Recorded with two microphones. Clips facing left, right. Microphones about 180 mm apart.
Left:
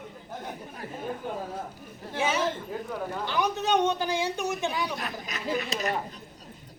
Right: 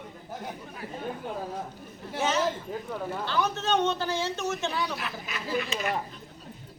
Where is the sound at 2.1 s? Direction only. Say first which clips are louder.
Even; 10° left (ahead or behind).